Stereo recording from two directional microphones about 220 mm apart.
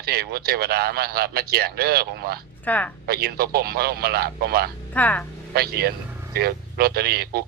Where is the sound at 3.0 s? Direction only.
45° right (ahead or behind).